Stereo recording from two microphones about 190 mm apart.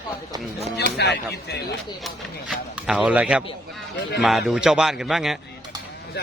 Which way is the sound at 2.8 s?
5° right (ahead or behind).